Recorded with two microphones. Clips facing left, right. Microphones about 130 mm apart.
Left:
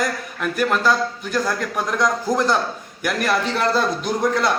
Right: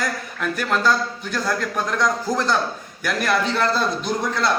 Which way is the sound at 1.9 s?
10° left (ahead or behind).